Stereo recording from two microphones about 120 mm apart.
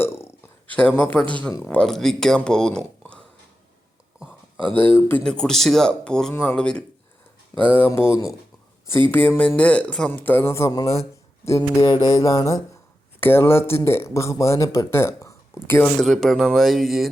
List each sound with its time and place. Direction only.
0.0 s speech: 20° left (ahead or behind)
4.7 s speech: 15° left (ahead or behind)
5.2 s speech: 5° left (ahead or behind); by 12.5 s 30° left (ahead or behind)
13.1 s speech: 20° left (ahead or behind)
16.0 s speech: 5° left (ahead or behind)